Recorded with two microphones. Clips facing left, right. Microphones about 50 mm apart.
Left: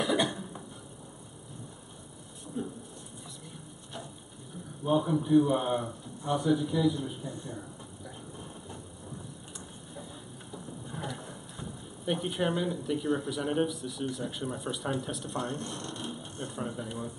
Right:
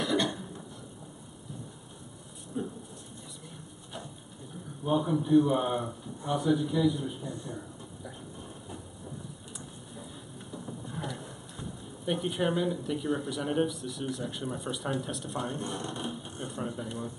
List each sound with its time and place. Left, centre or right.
0.0 s cough: centre
2.6 s thunder: centre
4.8 s a man's voice: centre
10.5 s speech: centre
15.6 s speech: centre
16.1 s a sound: centre